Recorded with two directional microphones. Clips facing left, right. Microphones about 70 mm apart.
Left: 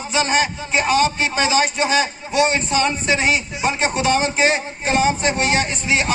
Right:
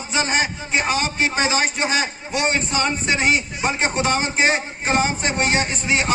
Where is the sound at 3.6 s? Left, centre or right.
Right.